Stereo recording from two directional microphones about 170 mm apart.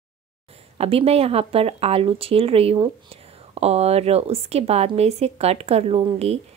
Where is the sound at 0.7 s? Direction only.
35° right (ahead or behind).